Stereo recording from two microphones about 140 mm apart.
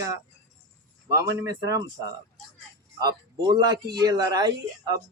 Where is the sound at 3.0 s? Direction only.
30° right (ahead or behind).